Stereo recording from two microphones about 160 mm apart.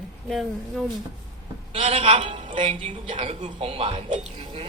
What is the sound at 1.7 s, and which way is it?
A woman's voice, 35° right (ahead or behind).